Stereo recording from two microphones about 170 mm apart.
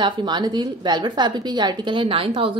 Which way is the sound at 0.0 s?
25° right (ahead or behind).